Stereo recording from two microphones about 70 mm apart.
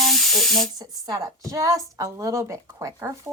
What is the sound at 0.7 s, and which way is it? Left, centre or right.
A woman's voice, right.